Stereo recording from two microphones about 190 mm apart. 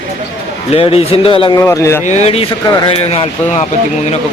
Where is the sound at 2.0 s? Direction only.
35° left (ahead or behind).